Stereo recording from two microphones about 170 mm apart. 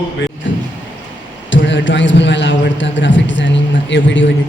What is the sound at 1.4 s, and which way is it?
A man's voice, 90° left.